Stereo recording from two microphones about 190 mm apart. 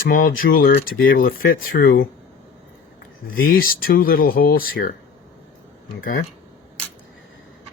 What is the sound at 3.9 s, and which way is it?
Speech, 50° left (ahead or behind).